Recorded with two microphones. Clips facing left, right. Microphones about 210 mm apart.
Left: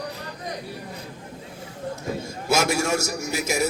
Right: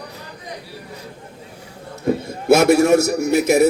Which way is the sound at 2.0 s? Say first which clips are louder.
Right 12 dB; 60° right (ahead or behind).